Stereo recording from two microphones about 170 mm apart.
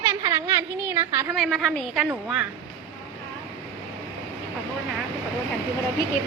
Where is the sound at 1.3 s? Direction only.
Centre (ahead or behind).